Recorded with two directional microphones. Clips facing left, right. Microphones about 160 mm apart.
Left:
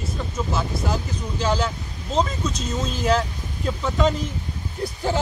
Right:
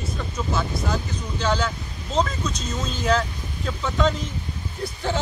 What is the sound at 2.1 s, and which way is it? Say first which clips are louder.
Speech: left 1 dB; 5° left (ahead or behind).